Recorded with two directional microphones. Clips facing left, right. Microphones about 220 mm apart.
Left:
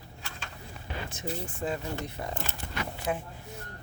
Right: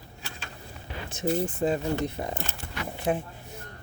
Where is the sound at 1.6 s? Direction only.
25° right (ahead or behind).